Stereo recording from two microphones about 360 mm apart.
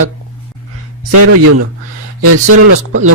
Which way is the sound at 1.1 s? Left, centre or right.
Right.